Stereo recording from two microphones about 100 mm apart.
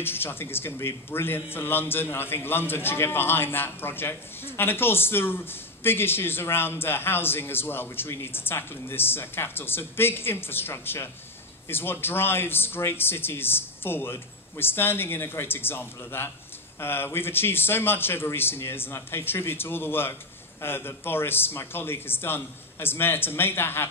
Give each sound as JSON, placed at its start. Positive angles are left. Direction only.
{"t": 0.0, "sound": "a man's voice", "side_deg": 20}